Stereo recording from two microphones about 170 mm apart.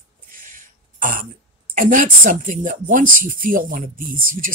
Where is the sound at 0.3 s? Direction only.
55° right (ahead or behind).